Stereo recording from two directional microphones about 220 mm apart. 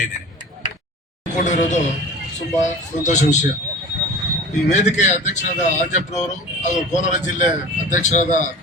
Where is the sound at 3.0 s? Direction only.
35° left (ahead or behind).